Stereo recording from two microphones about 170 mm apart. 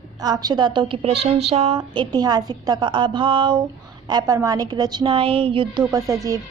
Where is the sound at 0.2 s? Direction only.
20° right (ahead or behind).